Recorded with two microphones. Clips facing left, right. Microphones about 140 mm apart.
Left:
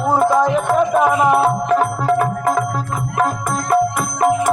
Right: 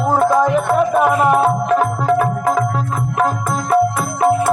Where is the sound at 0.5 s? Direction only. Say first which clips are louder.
Right 1 dB; 5° right (ahead or behind).